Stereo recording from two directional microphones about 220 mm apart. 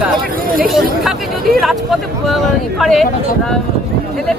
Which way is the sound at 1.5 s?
Centre (ahead or behind).